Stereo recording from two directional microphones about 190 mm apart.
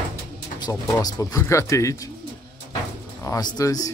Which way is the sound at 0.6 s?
20° left (ahead or behind).